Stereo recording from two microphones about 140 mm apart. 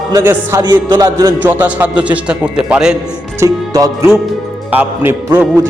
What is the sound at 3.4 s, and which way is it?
Speech, 25° right (ahead or behind).